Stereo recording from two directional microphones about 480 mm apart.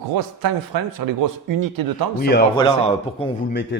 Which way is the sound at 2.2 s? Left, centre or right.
Centre.